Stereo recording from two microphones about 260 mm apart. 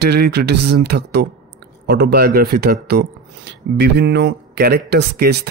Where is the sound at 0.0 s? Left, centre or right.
Right.